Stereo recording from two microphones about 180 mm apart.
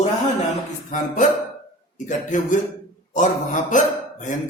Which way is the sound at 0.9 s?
45° left (ahead or behind).